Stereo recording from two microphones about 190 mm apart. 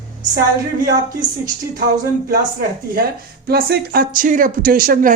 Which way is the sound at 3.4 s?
55° right (ahead or behind).